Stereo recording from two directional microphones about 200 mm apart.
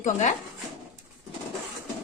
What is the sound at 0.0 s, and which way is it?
Speech, 40° left (ahead or behind).